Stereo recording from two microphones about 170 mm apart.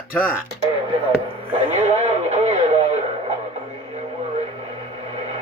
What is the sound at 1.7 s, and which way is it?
Radio, 40° right (ahead or behind).